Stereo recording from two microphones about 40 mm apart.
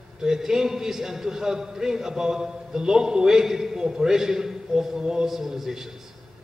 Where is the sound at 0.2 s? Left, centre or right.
Centre.